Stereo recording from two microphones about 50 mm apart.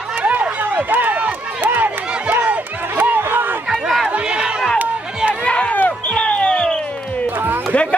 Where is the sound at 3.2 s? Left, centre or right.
Right.